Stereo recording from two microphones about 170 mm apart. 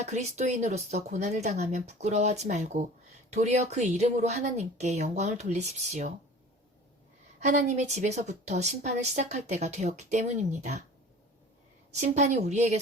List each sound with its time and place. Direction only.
0.0 s speech: 40° right (ahead or behind)
7.3 s a woman's voice: 45° right (ahead or behind)
12.1 s speech: 40° right (ahead or behind)